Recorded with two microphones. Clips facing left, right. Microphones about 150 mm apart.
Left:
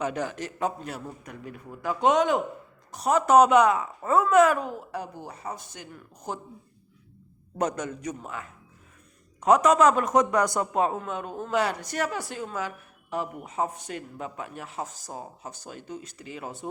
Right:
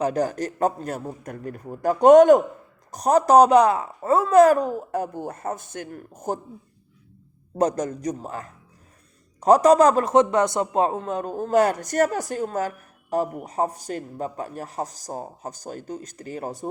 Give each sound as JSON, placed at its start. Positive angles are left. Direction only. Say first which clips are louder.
{"t": 0.0, "sound": "a man's voice", "louder": "right 7 dB", "side_deg": -40}
{"t": 7.6, "sound": "a man's voice", "louder": "right 6 dB", "side_deg": -35}